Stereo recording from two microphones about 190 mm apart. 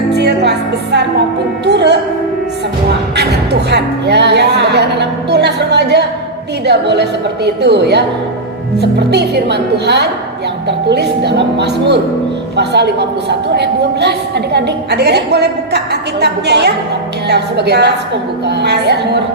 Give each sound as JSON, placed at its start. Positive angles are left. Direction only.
{"t": 0.1, "sound": "music", "side_deg": -60}
{"t": 3.2, "sound": "music", "side_deg": -60}
{"t": 6.7, "sound": "a woman's voice", "side_deg": -60}